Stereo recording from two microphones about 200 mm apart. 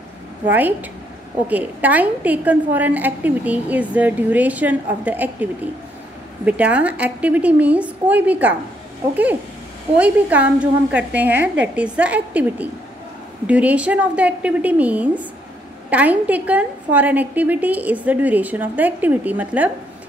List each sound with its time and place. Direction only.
0.5 s a woman's voice: 10° right (ahead or behind)